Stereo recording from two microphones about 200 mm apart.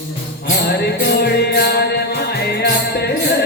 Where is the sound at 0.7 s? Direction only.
55° left (ahead or behind).